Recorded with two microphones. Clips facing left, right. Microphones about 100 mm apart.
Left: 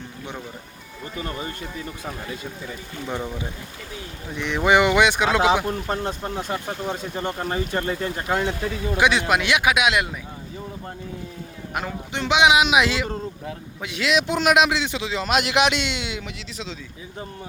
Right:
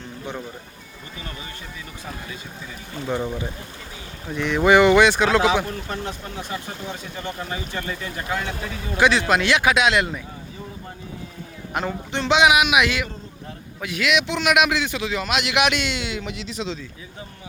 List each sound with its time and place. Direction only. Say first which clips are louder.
1.2 s speech: left 7 dB; 40° left (ahead or behind)
4.4 s speech: right 3 dB; 20° left (ahead or behind)
5.6 s speech: left 4 dB; 40° left (ahead or behind)
9.0 s speech: right 2 dB; 15° left (ahead or behind)
11.7 s a man's voice: right 3 dB; 5° left (ahead or behind); by 15.3 s 20° left (ahead or behind)
15.3 s a man's voice: left 2 dB; 35° left (ahead or behind); by 16.2 s 20° left (ahead or behind)
16.2 s speech: right 5 dB; centre (ahead or behind)